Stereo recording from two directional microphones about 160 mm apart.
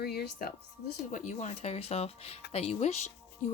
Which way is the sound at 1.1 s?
50° left (ahead or behind).